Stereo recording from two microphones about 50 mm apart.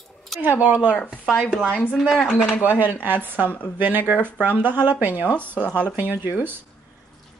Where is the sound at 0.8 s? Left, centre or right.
Left.